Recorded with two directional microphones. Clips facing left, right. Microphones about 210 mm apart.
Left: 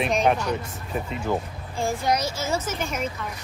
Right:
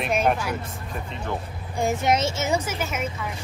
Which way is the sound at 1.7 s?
20° right (ahead or behind).